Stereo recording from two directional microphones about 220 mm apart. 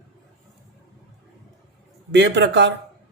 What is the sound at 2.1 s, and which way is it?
Speech, 55° right (ahead or behind).